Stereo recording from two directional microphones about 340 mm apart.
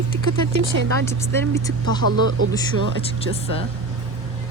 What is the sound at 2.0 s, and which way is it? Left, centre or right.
Speech, right.